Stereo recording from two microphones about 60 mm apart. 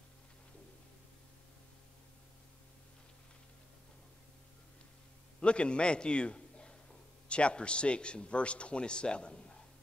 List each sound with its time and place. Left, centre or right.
5.4 s a man's voice: centre